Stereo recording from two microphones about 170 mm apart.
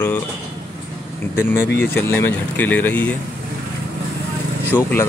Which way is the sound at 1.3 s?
10° left (ahead or behind).